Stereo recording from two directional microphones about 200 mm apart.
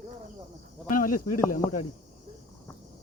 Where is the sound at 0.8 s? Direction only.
40° left (ahead or behind).